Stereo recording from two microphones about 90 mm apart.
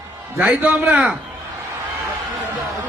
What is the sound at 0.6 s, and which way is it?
Speech, 10° right (ahead or behind).